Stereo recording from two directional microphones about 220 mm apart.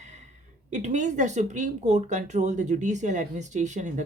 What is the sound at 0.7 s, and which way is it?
Speech, 35° right (ahead or behind).